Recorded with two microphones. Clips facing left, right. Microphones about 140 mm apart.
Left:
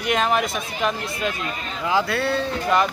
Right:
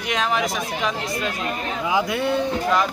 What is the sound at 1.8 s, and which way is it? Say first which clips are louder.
Speech: left 1 dB; 15° right (ahead or behind).